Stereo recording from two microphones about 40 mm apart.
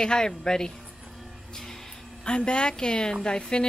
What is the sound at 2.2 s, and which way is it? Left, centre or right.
A woman's voice, left.